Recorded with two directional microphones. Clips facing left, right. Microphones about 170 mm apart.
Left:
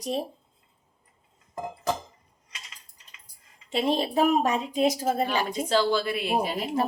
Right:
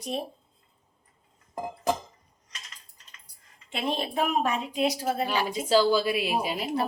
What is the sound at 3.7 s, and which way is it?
A woman's voice, 35° left (ahead or behind).